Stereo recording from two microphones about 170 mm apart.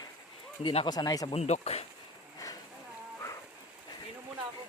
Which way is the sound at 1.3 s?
40° left (ahead or behind).